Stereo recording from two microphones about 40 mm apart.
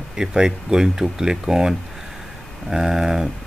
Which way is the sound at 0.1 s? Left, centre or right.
Centre.